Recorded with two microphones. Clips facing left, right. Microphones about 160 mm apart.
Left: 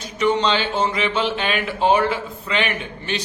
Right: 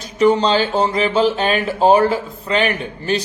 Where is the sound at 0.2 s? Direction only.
35° right (ahead or behind).